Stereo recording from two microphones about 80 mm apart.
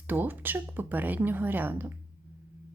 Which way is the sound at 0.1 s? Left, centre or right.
Right.